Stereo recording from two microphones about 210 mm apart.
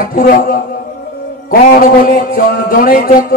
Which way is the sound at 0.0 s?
45° left (ahead or behind).